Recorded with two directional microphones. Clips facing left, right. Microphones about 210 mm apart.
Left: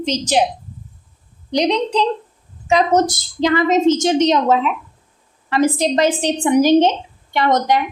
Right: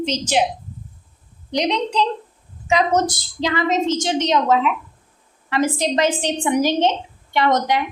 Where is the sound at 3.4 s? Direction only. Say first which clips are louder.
Left 6 dB; 45° left (ahead or behind).